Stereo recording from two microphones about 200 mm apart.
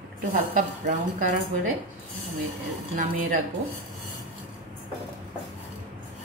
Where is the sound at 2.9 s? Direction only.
40° right (ahead or behind).